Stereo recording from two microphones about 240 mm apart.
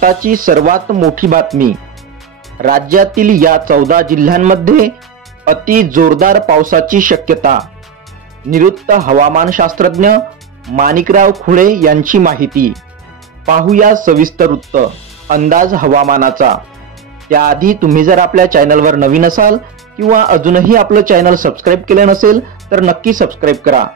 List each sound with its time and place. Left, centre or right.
0.0 s speech: right
2.6 s speech: right
8.8 s speech: right
13.7 s speech: right